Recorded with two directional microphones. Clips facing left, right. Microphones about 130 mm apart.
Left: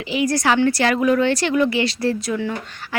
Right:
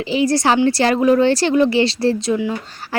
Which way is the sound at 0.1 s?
30° right (ahead or behind).